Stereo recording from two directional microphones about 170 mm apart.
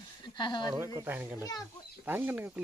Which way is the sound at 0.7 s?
15° right (ahead or behind).